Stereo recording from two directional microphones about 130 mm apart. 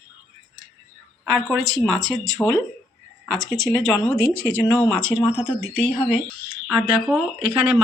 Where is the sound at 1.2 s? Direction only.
Centre (ahead or behind).